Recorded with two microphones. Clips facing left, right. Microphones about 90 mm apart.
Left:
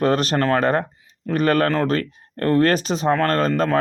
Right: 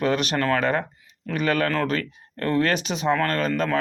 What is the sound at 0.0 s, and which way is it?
Speech, 40° left (ahead or behind).